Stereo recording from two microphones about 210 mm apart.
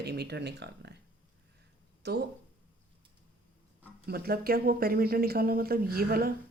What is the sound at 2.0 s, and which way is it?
Speech, 50° right (ahead or behind).